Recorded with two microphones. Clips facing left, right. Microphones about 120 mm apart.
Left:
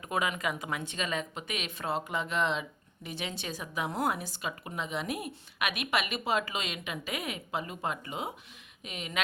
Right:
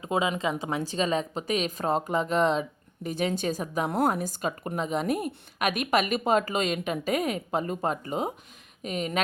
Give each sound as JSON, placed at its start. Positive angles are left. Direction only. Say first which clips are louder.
{"t": 0.0, "sound": "a woman's voice", "louder": "right 5 dB", "side_deg": -25}